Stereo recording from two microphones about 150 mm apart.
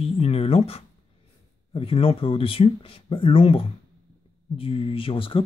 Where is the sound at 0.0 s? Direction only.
40° left (ahead or behind).